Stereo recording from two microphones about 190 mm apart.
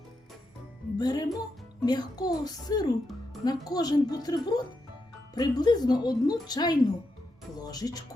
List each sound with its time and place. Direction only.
0.9 s a woman's voice: 20° left (ahead or behind)